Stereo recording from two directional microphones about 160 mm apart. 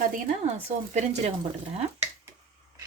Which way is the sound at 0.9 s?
45° right (ahead or behind).